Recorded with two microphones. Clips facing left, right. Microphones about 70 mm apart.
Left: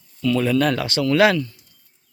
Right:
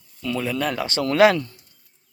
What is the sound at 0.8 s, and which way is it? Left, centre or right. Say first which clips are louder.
Speech: left 2 dB; right.